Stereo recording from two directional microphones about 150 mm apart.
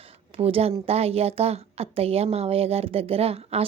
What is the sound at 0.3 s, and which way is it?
A woman's voice, 40° right (ahead or behind).